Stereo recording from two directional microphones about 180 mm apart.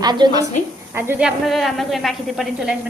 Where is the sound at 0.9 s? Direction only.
10° right (ahead or behind).